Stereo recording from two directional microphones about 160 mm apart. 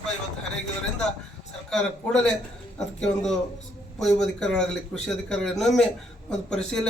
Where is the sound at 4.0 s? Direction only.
Centre (ahead or behind).